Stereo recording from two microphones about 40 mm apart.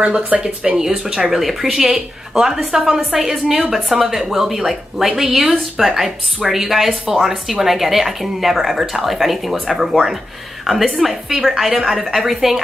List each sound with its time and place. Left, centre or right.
0.3 s speech: right
0.7 s a woman's voice: centre